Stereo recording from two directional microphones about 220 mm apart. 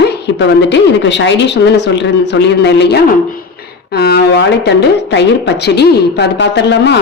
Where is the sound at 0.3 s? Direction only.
55° left (ahead or behind).